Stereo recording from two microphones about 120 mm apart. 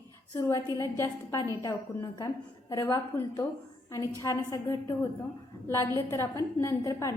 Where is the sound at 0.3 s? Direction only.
25° left (ahead or behind).